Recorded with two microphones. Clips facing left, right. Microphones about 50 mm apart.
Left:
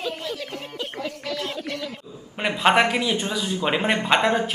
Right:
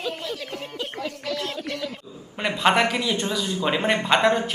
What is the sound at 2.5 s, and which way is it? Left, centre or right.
Speech, centre.